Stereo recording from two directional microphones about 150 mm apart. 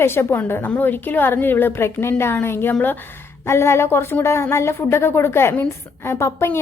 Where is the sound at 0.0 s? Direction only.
15° left (ahead or behind).